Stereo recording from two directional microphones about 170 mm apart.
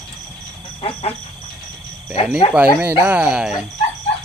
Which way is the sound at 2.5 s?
5° right (ahead or behind).